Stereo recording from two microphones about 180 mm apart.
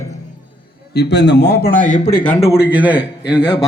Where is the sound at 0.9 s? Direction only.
65° left (ahead or behind); by 2.3 s 50° left (ahead or behind).